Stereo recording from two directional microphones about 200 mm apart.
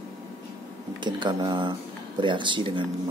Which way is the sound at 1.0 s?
20° right (ahead or behind).